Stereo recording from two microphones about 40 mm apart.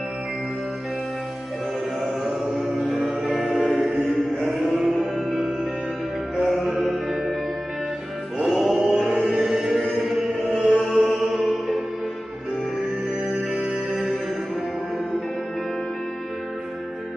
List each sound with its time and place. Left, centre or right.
2.0 s chant: right
3.1 s music: right
3.4 s music: centre
3.7 s music: right
4.5 s chant: centre
5.1 s music: right
6.5 s music: centre
8.5 s music: centre
10.9 s music: left
11.1 s music: centre
13.5 s music: centre